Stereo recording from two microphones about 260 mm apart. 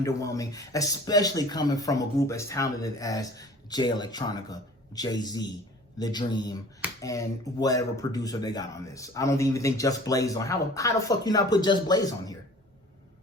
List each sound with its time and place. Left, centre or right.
0.0 s speech: centre